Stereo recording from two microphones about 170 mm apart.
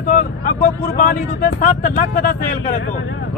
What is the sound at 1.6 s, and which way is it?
Speech, 50° left (ahead or behind).